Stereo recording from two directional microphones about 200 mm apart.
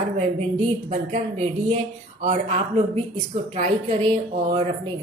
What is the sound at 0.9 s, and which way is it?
Speech, 35° right (ahead or behind).